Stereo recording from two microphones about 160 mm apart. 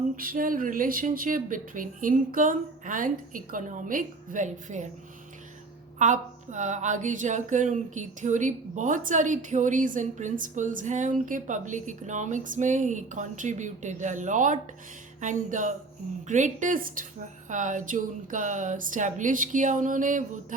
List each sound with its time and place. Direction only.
0.2 s speech: 60° right (ahead or behind)
6.0 s speech: 50° right (ahead or behind)